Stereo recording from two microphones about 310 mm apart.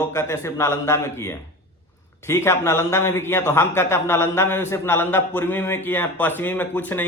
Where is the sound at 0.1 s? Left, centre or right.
Centre.